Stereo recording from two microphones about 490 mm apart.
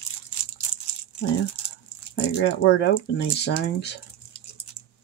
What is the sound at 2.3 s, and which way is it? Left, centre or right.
Speech, left.